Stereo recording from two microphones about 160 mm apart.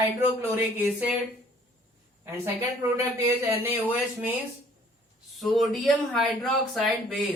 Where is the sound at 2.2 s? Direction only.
15° right (ahead or behind).